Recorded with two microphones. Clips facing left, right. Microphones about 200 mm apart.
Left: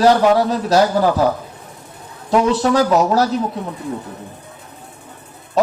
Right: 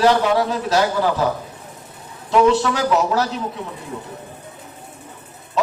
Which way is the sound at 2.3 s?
40° left (ahead or behind).